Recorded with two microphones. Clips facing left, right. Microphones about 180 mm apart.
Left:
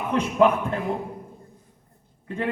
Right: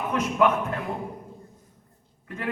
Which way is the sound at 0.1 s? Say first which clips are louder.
Left 3 dB; 30° left (ahead or behind).